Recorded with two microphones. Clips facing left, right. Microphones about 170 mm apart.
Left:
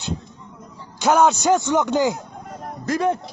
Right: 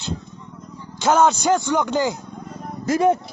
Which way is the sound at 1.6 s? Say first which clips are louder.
Left 2 dB; 20° left (ahead or behind).